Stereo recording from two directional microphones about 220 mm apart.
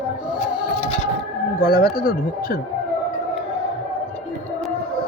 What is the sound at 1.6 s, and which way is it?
Speech, 40° left (ahead or behind).